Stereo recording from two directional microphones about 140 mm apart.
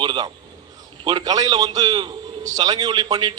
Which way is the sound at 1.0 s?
30° right (ahead or behind).